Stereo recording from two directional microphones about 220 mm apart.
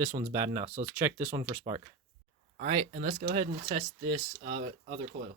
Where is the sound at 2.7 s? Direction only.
25° right (ahead or behind).